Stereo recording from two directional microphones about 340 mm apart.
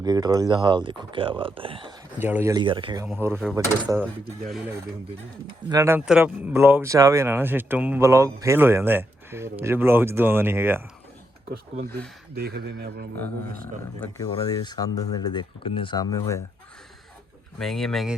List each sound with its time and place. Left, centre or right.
0.0 s speech: centre
11.9 s speech: right
14.0 s speech: centre
17.6 s speech: centre